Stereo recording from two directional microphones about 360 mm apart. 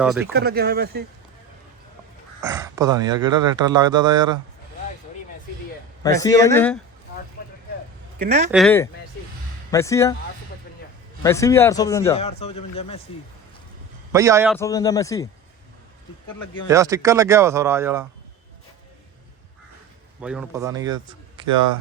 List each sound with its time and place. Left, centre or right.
0.0 s speech: centre
0.3 s speech: right
2.4 s speech: centre
6.0 s a man's voice: centre
8.2 s speech: centre
8.4 s a man's voice: centre
11.2 s a man's voice: centre
14.1 s speech: centre
14.6 s a man's voice: centre
16.6 s speech: centre
20.2 s speech: centre